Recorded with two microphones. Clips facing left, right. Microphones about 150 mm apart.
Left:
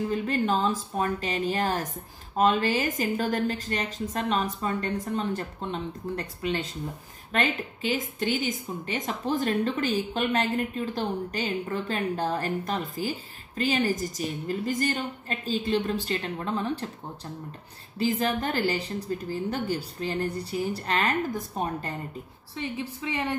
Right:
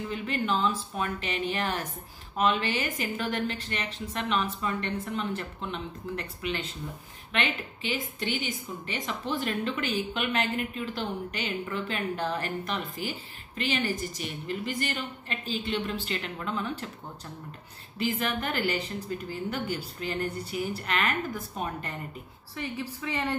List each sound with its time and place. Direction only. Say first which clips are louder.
0.1 s a woman's voice: left 1 dB; 40° left (ahead or behind)
22.6 s a woman's voice: left 2 dB; 20° left (ahead or behind)